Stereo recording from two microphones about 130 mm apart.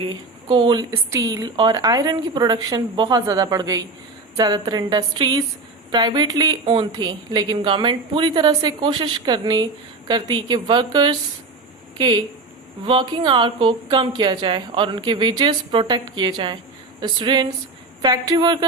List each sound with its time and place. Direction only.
0.0 s a woman's voice: 35° right (ahead or behind)